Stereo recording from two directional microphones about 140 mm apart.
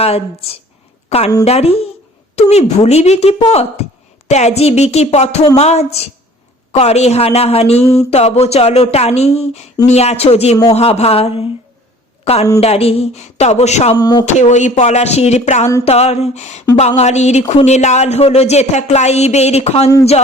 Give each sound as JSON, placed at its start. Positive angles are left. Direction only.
{"t": 0.0, "sound": "a woman's voice", "side_deg": 45}
{"t": 13.9, "sound": "speech", "side_deg": 30}
{"t": 14.3, "sound": "speech", "side_deg": 55}